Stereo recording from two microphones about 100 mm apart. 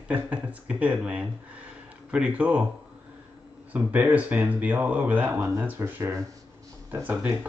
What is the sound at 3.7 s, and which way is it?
Speech, 15° right (ahead or behind).